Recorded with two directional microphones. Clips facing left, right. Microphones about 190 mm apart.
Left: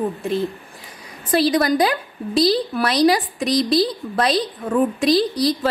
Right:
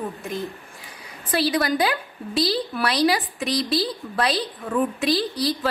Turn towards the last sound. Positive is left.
turn(degrees=40)  # may be behind; listen again after turning